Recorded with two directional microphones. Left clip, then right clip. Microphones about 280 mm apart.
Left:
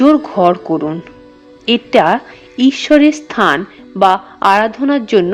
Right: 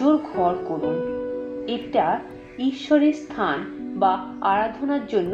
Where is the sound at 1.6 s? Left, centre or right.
Left.